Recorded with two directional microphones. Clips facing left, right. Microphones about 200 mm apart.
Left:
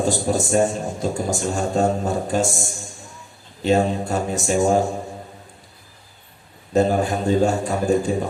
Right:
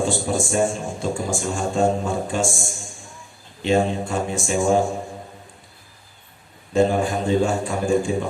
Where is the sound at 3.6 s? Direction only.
40° left (ahead or behind).